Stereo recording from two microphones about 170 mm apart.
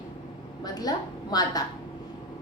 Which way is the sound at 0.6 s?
25° left (ahead or behind).